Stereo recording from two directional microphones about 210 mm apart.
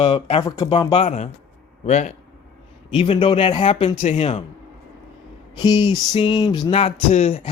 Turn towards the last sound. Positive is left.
turn(degrees=30)  # may be behind; listen again after turning